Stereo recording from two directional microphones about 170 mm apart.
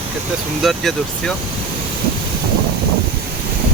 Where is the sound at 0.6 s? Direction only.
Centre (ahead or behind).